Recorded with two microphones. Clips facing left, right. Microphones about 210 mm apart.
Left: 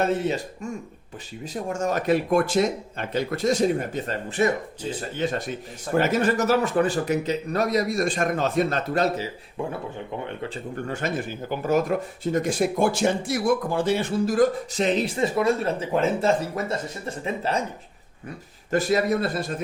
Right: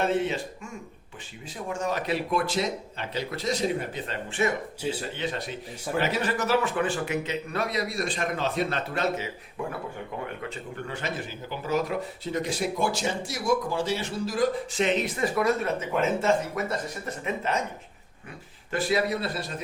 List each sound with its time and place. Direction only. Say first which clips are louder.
1.7 s speech: left 5 dB; 45° left (ahead or behind)
10.8 s speech: left 6 dB; 45° left (ahead or behind); by 17.6 s 30° left (ahead or behind)
18.7 s speech: left 4 dB; 45° left (ahead or behind)